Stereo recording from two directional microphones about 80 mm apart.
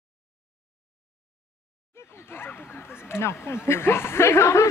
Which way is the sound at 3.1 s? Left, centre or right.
Left.